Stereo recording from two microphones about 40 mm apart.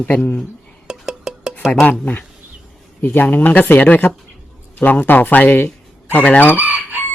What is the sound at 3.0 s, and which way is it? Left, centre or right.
Speech, left.